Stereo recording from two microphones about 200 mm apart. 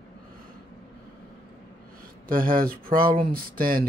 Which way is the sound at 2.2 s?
45° right (ahead or behind).